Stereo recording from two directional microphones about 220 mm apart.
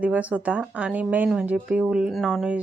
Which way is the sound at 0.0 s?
5° right (ahead or behind).